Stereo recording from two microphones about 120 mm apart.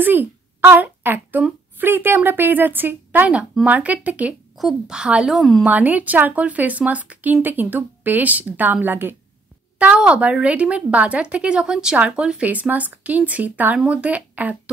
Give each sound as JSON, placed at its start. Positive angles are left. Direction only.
{"t": 0.0, "sound": "a woman's voice", "side_deg": -15}
{"t": 5.7, "sound": "a woman's voice", "side_deg": -10}